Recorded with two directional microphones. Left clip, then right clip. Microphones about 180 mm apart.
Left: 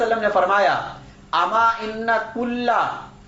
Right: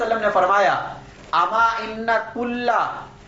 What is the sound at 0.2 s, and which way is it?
A man's voice, 35° left (ahead or behind).